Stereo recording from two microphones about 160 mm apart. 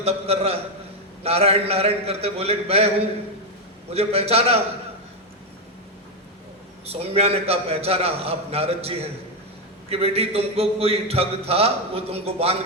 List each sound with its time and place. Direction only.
0.0 s a man's voice: 40° right (ahead or behind)
6.8 s a man's voice: 40° right (ahead or behind)